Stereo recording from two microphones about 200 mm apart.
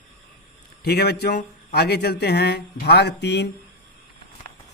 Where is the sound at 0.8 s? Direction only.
55° left (ahead or behind).